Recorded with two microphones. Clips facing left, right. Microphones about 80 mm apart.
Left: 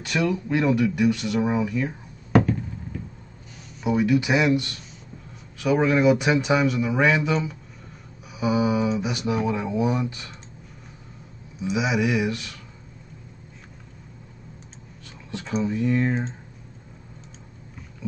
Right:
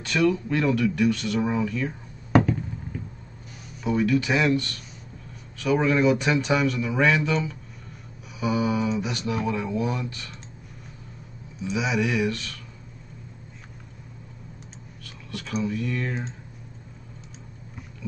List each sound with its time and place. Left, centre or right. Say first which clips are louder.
0.0 s speech: right 2 dB; centre
3.8 s speech: left 2 dB; centre
11.6 s speech: left 2 dB; centre
15.0 s speech: left 3 dB; left